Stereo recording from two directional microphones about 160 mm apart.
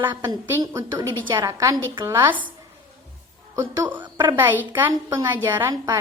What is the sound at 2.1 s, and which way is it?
Speech, 15° right (ahead or behind).